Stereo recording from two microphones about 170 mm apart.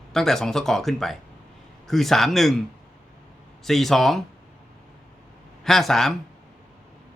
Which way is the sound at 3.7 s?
Centre (ahead or behind).